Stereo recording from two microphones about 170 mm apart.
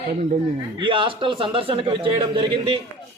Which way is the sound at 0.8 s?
30° right (ahead or behind).